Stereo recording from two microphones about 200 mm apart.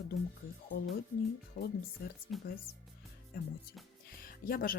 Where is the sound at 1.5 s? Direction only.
35° left (ahead or behind).